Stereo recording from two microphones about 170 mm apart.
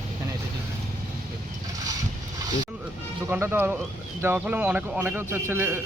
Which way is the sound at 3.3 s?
15° right (ahead or behind).